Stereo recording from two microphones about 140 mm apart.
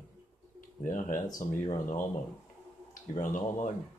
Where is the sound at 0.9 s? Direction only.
65° left (ahead or behind).